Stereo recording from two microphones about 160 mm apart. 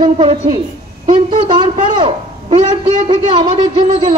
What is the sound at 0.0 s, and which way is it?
A woman's voice, 30° right (ahead or behind).